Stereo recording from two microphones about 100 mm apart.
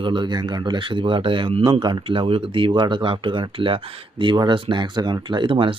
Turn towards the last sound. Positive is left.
turn(degrees=-60)  # may be behind; listen again after turning